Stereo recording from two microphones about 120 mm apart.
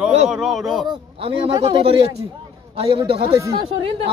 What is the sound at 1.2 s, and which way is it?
Speech, 50° right (ahead or behind).